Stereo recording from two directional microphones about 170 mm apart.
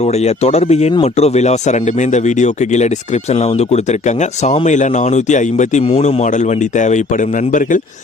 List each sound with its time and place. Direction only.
0.0 s speech: 40° left (ahead or behind)